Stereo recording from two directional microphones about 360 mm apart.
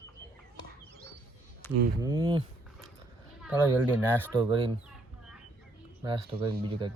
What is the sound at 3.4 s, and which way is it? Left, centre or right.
Speech, centre.